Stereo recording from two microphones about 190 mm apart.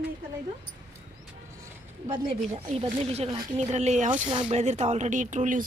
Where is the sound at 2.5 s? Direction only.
30° right (ahead or behind).